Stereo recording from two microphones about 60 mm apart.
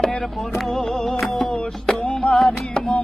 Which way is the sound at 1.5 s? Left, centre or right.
Centre.